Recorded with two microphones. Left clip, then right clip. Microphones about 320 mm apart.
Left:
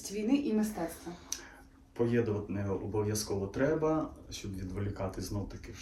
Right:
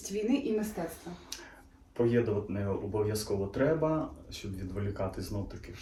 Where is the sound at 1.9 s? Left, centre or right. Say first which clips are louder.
Right 3 dB; centre.